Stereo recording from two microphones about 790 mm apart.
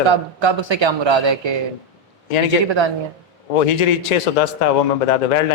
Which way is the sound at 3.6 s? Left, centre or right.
Left.